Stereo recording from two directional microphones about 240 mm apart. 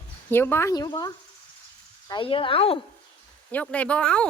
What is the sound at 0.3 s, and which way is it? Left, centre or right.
Speech, centre.